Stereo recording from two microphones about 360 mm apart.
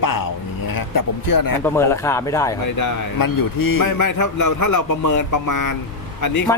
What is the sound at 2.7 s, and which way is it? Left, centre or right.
A man's voice, left.